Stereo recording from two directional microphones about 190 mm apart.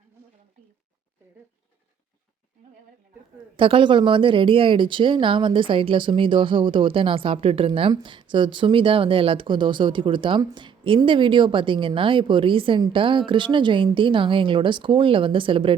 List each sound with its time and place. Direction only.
3.6 s speech: 25° right (ahead or behind)